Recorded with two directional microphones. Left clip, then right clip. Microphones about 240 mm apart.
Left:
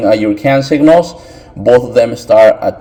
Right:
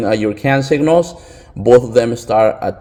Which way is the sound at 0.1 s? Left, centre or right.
Right.